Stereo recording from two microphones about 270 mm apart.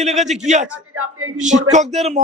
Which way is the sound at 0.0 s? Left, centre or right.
Right.